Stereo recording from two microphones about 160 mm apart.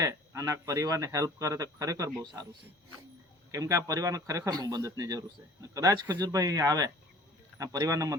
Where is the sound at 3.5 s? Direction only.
20° right (ahead or behind).